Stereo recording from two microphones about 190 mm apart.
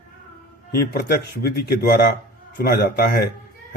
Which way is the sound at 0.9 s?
55° left (ahead or behind).